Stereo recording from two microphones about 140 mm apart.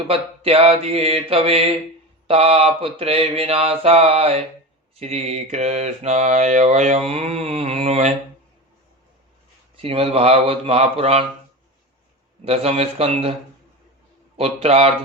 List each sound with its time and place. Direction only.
0.1 s mantra: 40° right (ahead or behind)
9.7 s mantra: 40° right (ahead or behind)
12.5 s mantra: 45° right (ahead or behind)
14.3 s mantra: 45° right (ahead or behind)